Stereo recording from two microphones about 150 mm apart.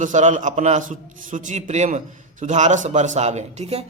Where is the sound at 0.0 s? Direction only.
55° right (ahead or behind).